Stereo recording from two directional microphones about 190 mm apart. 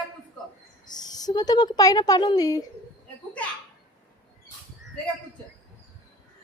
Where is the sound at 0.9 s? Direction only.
20° left (ahead or behind).